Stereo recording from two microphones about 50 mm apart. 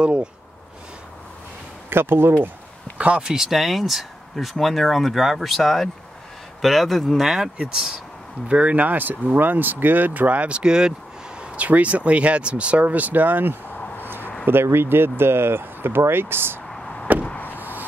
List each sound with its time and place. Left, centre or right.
0.0 s speech: right
1.9 s speech: right
3.2 s speech: centre
7.5 s speech: right
11.5 s speech: right
14.4 s speech: right
16.6 s chop: centre
17.6 s a sound: right